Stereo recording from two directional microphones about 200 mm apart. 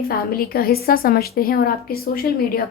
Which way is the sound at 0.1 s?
50° left (ahead or behind).